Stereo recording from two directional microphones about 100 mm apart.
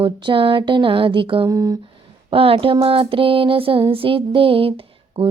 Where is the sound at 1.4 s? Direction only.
35° right (ahead or behind).